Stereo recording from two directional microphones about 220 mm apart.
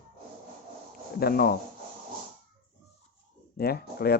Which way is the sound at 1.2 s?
45° left (ahead or behind).